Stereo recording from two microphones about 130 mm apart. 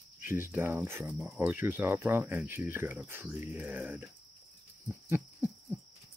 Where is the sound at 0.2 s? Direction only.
15° right (ahead or behind).